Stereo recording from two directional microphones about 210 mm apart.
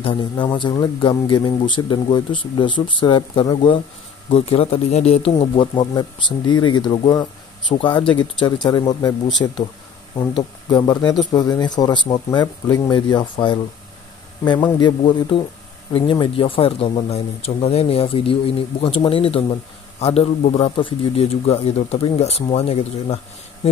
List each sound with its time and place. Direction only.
0.0 s speech: 25° left (ahead or behind)